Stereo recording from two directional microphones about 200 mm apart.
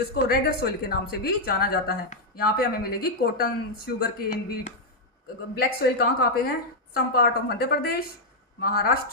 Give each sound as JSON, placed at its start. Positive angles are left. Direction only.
{"t": 0.3, "sound": "speech", "side_deg": 50}